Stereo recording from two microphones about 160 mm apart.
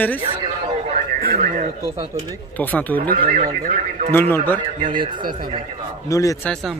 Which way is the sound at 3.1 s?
60° right (ahead or behind).